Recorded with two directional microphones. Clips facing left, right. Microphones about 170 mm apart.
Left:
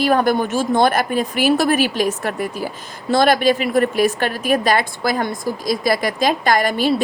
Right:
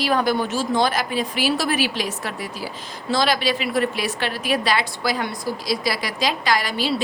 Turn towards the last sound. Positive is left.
turn(degrees=50)  # may be behind; listen again after turning